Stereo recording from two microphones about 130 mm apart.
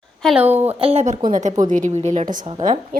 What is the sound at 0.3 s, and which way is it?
Speech, 15° right (ahead or behind).